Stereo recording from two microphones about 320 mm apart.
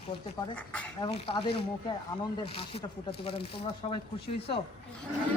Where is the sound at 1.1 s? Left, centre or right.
Centre.